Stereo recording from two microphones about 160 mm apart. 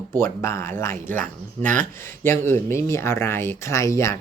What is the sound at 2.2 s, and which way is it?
Speech, 15° left (ahead or behind).